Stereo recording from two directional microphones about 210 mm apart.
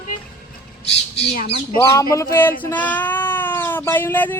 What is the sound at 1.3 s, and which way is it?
Speech, 50° left (ahead or behind).